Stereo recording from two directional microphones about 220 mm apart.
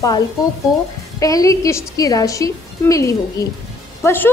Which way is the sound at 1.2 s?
15° left (ahead or behind).